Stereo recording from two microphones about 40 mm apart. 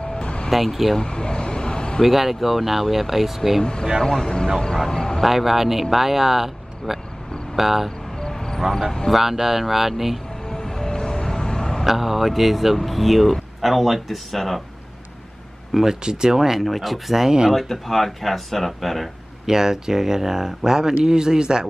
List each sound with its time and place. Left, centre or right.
0.0 s vehicle: left
0.9 s a sound: left
2.0 s speech: centre
4.0 s speech: centre
5.2 s speech: centre
8.2 s a sound: centre
9.1 s speech: centre
10.5 s vehicle: centre
11.8 s speech: centre
15.7 s speech: centre
17.3 s speech: centre
17.6 s speech: centre
19.4 s speech: centre